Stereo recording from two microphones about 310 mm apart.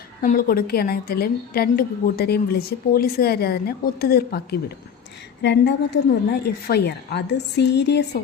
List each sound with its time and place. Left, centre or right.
0.2 s a woman's voice: left
5.4 s a woman's voice: left